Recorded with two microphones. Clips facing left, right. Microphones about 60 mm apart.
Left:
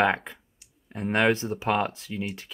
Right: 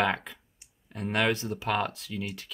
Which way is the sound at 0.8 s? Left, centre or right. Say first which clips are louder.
Left 4 dB; left.